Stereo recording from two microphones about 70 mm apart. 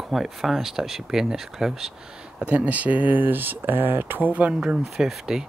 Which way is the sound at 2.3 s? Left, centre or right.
Centre.